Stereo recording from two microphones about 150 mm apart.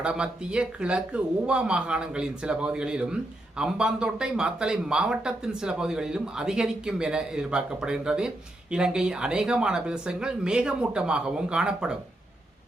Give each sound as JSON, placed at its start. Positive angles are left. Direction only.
{"t": 0.0, "sound": "speech", "side_deg": -5}